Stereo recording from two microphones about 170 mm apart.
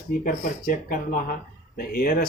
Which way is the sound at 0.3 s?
55° left (ahead or behind).